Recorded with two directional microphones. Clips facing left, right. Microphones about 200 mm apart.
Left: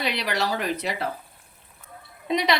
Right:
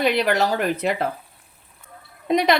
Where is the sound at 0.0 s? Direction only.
50° right (ahead or behind).